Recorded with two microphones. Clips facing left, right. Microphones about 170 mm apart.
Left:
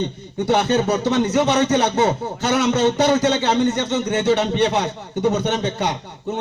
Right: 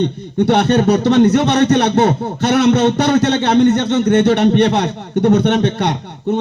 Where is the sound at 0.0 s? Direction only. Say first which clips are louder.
Right 8 dB; 65° right (ahead or behind).